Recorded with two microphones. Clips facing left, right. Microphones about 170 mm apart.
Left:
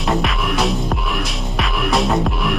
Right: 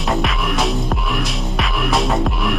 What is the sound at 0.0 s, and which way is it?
Music, centre (ahead or behind).